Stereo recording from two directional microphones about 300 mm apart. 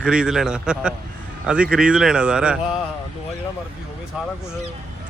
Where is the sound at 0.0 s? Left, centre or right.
Centre.